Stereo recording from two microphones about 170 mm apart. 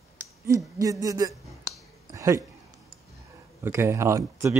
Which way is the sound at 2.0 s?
20° right (ahead or behind).